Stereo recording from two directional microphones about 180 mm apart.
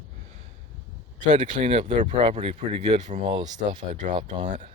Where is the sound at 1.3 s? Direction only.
40° right (ahead or behind).